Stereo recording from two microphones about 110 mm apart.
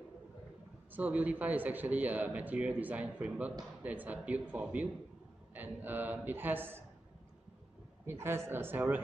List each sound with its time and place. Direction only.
0.9 s a man's voice: 15° right (ahead or behind)
8.1 s speech: 25° right (ahead or behind)